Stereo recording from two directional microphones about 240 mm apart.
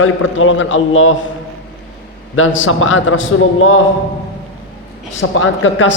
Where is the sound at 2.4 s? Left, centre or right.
Left.